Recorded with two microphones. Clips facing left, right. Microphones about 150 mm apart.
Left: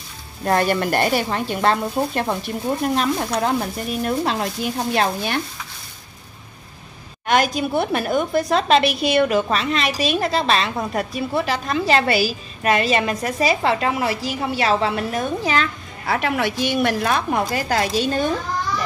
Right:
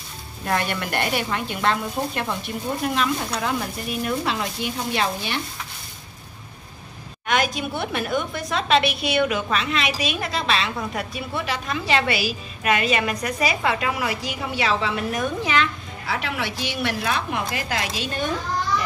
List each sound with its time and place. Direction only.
0.5 s a woman's voice: 40° left (ahead or behind)
7.2 s a woman's voice: 35° left (ahead or behind)
16.1 s a woman's voice: 50° left (ahead or behind)